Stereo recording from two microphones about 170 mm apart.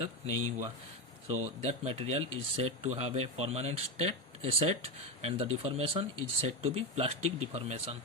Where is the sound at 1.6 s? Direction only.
40° right (ahead or behind).